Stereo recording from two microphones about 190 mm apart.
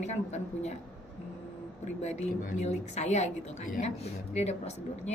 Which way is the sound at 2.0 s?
35° left (ahead or behind).